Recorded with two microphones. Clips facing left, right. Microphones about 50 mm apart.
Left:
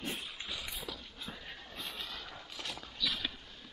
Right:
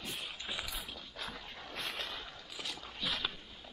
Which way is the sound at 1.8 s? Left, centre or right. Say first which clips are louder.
Right 4 dB; right.